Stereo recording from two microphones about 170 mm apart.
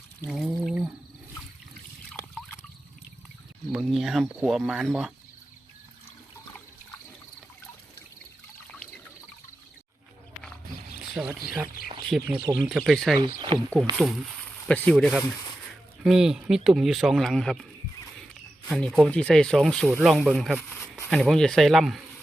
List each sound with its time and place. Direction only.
0.3 s a sound: centre (ahead or behind)
3.7 s speech: centre (ahead or behind)
11.1 s speech: centre (ahead or behind)
13.5 s speech: 30° right (ahead or behind)
14.7 s speech: 5° left (ahead or behind)
18.7 s speech: 5° left (ahead or behind)